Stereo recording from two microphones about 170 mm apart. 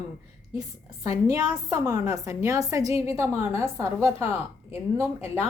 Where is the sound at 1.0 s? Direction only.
20° right (ahead or behind).